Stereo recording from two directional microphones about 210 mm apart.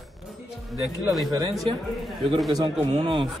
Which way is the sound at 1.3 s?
15° right (ahead or behind).